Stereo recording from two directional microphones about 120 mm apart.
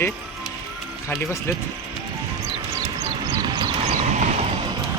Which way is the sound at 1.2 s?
20° left (ahead or behind).